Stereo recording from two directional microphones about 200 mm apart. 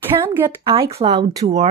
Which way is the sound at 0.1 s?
25° right (ahead or behind).